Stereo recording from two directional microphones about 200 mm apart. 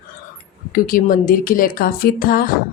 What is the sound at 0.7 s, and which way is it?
Speech, 45° left (ahead or behind).